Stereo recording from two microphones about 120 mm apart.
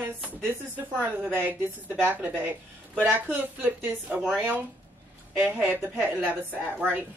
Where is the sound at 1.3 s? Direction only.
15° right (ahead or behind).